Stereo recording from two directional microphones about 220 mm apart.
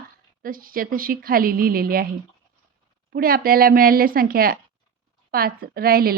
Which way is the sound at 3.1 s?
40° right (ahead or behind).